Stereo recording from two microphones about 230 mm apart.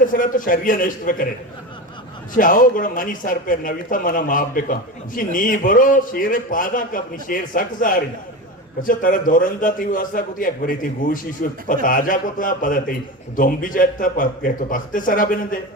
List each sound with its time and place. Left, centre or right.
0.0 s speech: left
2.3 s speech: left